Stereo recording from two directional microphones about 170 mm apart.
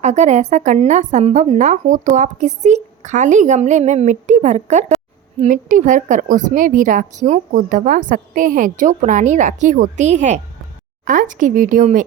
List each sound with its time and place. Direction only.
0.0 s a woman's voice: 40° right (ahead or behind)